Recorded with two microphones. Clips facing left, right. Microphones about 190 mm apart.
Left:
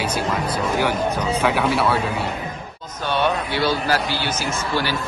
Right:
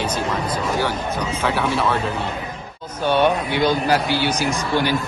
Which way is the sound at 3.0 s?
10° right (ahead or behind).